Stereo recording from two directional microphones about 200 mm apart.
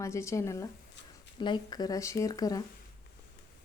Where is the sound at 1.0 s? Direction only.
65° left (ahead or behind).